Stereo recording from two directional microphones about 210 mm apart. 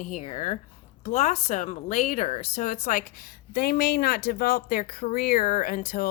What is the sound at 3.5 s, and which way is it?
Speech, 50° left (ahead or behind).